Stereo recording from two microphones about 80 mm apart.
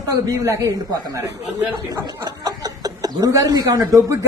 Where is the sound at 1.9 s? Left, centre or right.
Right.